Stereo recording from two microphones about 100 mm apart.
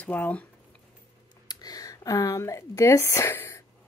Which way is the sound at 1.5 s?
40° left (ahead or behind).